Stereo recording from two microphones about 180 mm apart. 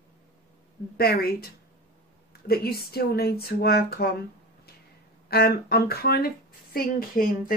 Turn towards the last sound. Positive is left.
turn(degrees=55)  # may be behind; listen again after turning